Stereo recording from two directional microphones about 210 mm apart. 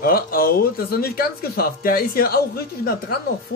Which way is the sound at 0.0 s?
45° left (ahead or behind).